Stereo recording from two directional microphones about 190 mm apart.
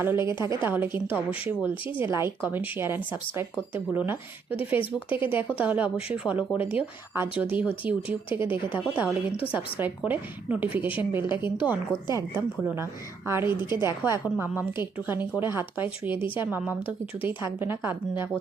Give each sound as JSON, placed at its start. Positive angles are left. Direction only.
{"t": 0.3, "sound": "a woman's voice", "side_deg": -15}
{"t": 4.8, "sound": "speech", "side_deg": 25}
{"t": 5.2, "sound": "a woman's voice", "side_deg": -10}